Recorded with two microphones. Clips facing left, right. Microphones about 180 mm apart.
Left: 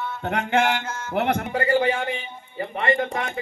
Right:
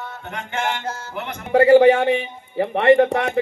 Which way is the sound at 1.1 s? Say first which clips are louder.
Left 8 dB; 60° left (ahead or behind).